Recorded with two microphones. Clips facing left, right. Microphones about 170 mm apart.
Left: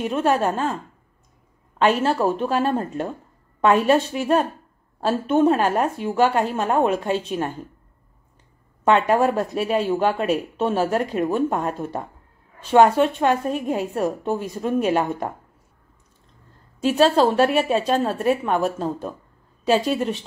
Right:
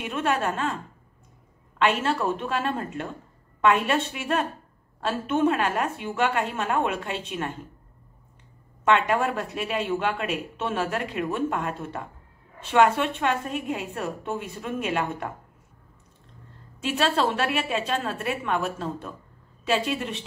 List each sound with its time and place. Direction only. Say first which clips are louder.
0.0 s speech: left 6 dB; 35° left (ahead or behind)
1.8 s speech: left 5 dB; 35° left (ahead or behind)
8.8 s speech: left 5 dB; 40° left (ahead or behind)
16.8 s speech: left 7 dB; 40° left (ahead or behind)